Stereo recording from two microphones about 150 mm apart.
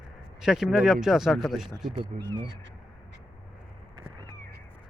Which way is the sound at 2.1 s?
50° right (ahead or behind).